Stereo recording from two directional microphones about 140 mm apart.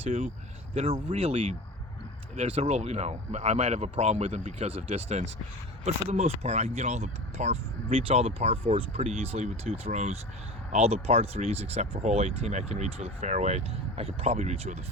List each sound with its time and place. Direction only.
0.0 s speech: 45° right (ahead or behind)